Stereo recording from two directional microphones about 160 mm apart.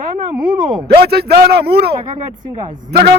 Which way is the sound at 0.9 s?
80° right.